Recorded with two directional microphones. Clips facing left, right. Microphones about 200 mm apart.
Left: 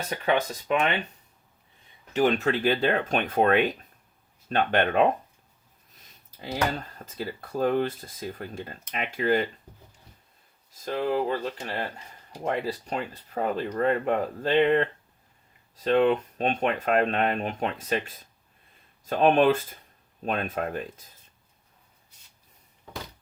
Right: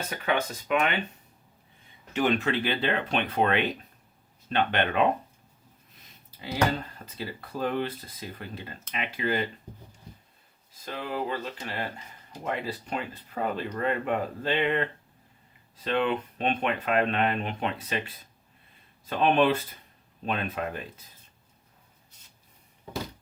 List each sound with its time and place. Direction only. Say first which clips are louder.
0.3 s speech: left 2 dB; 35° left (ahead or behind)
2.1 s speech: left 2 dB; 40° left (ahead or behind)
7.0 s speech: left 3 dB; 45° left (ahead or behind)
10.7 s speech: left 8 dB; 45° left (ahead or behind)